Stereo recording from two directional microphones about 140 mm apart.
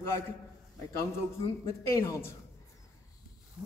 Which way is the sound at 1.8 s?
20° left (ahead or behind).